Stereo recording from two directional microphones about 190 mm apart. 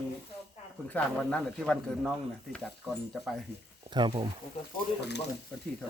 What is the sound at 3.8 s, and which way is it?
Speech, 25° right (ahead or behind).